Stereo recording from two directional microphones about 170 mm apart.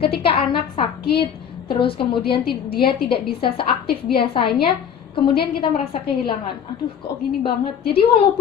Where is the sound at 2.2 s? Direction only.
70° left (ahead or behind).